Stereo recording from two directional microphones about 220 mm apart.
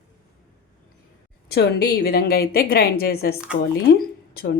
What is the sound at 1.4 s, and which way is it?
A woman's voice, 45° left (ahead or behind).